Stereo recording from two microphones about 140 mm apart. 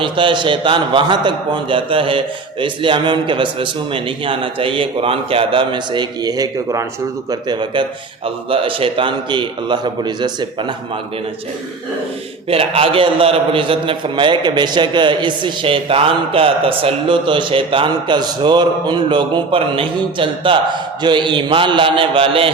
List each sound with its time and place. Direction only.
0.0 s a man's voice: 35° right (ahead or behind)
12.5 s a man's voice: 45° right (ahead or behind)